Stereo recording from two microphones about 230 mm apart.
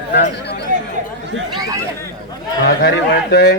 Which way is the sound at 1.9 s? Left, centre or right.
Centre.